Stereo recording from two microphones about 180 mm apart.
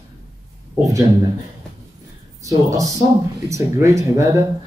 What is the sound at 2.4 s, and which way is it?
A man's voice, 20° right (ahead or behind).